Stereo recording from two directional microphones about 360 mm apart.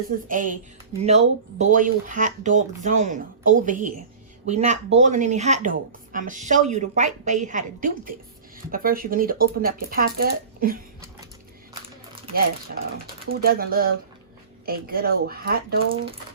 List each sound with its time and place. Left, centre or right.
0.3 s speech: right
12.2 s a sound: right
13.2 s speech: right